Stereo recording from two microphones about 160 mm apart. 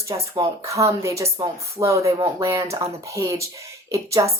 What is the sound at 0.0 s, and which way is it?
Speech, 20° right (ahead or behind).